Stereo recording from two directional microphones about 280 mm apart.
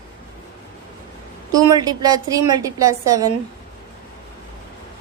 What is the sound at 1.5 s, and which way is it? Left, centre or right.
A woman's voice, centre.